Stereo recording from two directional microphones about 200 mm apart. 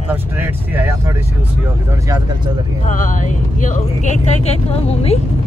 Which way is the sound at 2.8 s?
40° left (ahead or behind).